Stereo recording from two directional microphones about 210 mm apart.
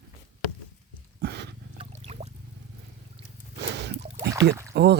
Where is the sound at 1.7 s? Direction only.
30° right (ahead or behind).